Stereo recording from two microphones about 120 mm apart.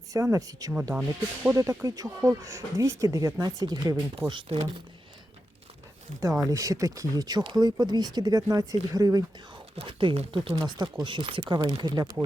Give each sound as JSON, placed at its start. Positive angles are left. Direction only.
{"t": 0.1, "sound": "speech", "side_deg": -30}
{"t": 6.1, "sound": "speech", "side_deg": -25}
{"t": 9.7, "sound": "speech", "side_deg": -45}
{"t": 10.7, "sound": "speech", "side_deg": -35}